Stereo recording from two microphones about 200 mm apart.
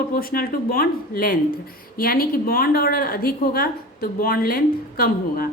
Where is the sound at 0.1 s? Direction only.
45° left (ahead or behind).